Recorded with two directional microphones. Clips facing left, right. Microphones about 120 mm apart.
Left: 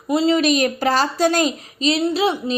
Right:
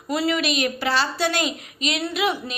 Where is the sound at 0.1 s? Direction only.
25° left (ahead or behind).